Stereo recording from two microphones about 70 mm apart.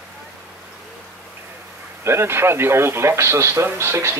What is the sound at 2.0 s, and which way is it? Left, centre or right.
A man's voice, right.